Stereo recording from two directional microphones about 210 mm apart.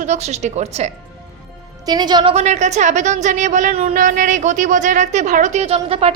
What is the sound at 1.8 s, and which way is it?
A woman's voice, 20° right (ahead or behind).